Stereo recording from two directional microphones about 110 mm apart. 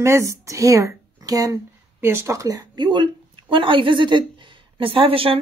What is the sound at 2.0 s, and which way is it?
A woman's voice, 20° right (ahead or behind).